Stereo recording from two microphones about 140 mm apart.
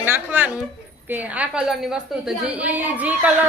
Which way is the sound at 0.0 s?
15° right (ahead or behind).